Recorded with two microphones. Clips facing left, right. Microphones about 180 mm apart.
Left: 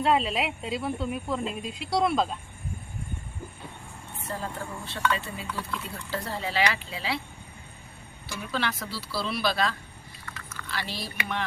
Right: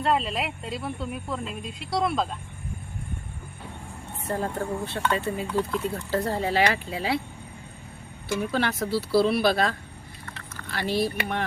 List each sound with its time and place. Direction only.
0.0 s speech: centre (ahead or behind)
4.3 s speech: 50° right (ahead or behind)
8.5 s speech: 50° right (ahead or behind)